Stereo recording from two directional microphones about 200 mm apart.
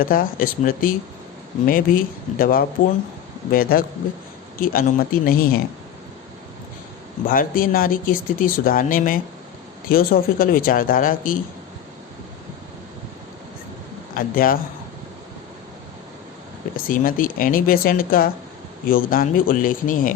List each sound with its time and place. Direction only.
0.0 s speech: 45° left (ahead or behind)
7.3 s speech: 45° left (ahead or behind)
14.2 s speech: 45° left (ahead or behind)
16.7 s speech: 45° left (ahead or behind)